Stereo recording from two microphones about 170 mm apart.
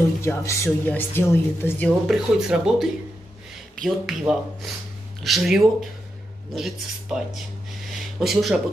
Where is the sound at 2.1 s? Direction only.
5° right (ahead or behind).